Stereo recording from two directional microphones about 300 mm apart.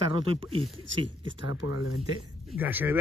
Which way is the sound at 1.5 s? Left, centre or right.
Left.